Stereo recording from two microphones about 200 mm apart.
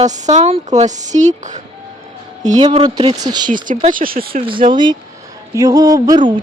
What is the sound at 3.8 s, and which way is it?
Speech, 40° right (ahead or behind).